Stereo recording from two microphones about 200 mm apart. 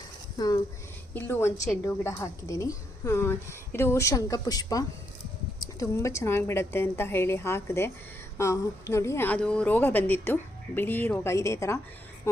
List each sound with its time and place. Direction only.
0.3 s a woman's voice: 20° left (ahead or behind)